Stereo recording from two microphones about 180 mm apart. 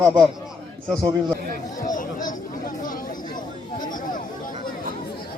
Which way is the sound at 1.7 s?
45° left (ahead or behind).